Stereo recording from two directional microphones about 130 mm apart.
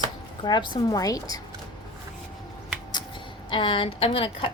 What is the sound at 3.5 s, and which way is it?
A woman's voice, 40° left (ahead or behind).